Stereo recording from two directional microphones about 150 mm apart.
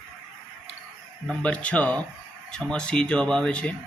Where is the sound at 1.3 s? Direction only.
10° left (ahead or behind).